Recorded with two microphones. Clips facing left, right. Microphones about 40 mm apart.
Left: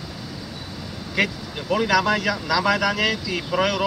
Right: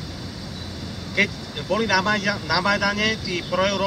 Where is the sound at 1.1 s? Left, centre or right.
Centre.